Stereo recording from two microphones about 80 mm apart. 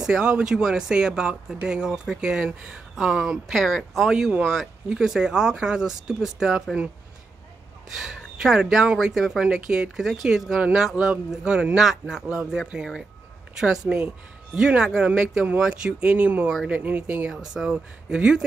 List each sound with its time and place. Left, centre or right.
0.0 s speech: centre
8.0 s speech: centre
17.3 s speech: centre